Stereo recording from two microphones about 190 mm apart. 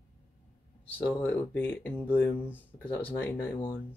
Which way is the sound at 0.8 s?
10° left (ahead or behind).